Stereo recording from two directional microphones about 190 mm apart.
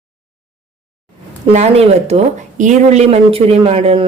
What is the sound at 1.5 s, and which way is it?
Speech, 35° right (ahead or behind).